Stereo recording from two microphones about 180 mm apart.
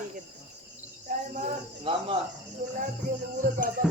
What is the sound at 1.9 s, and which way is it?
Cricket, 30° right (ahead or behind).